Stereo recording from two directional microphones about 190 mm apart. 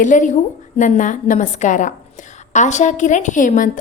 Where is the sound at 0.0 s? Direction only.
40° left (ahead or behind).